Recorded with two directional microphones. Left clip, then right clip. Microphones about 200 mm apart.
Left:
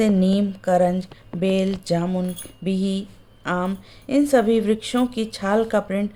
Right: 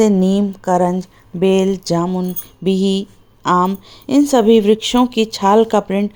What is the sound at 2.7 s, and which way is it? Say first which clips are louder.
A woman's voice: right 9 dB; 30° right (ahead or behind).